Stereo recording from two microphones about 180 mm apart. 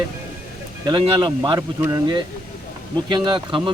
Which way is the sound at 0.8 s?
25° right (ahead or behind).